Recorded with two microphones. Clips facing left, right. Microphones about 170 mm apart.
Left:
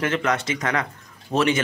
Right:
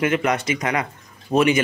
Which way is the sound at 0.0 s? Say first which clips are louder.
Right 3 dB; 15° right (ahead or behind).